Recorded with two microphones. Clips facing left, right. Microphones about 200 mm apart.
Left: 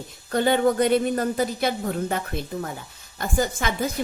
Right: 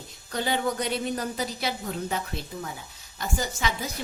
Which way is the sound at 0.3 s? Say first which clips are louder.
Left 8 dB; 55° left (ahead or behind).